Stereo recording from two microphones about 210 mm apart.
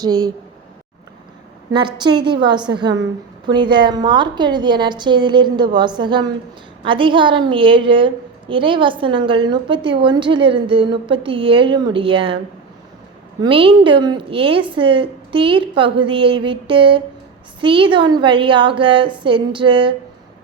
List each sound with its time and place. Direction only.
0.0 s a woman's voice: 20° right (ahead or behind)
1.7 s a woman's voice: 20° right (ahead or behind)
13.4 s a woman's voice: 25° right (ahead or behind)